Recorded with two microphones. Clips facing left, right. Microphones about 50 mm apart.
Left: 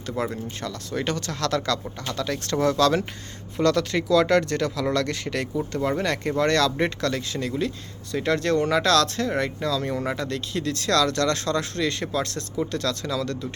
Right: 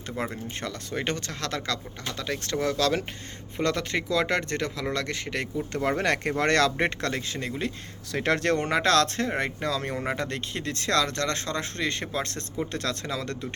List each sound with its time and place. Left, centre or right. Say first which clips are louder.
0.2 s speech: left 3 dB; right; by 3.0 s centre
3.6 s speech: left 5 dB; right
5.7 s speech: right 1 dB; right
8.1 s speech: left 2 dB; right